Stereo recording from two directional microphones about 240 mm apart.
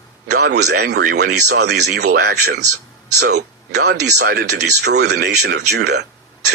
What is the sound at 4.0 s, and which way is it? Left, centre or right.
Speech, right.